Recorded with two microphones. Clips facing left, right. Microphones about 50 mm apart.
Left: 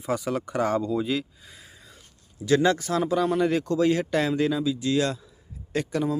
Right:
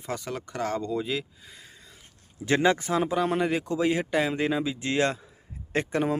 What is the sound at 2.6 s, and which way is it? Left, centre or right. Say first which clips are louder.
Speech: even; right.